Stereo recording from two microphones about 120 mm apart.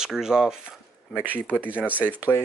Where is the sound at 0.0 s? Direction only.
5° right (ahead or behind).